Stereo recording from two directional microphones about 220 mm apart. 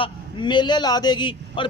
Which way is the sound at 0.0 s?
20° left (ahead or behind).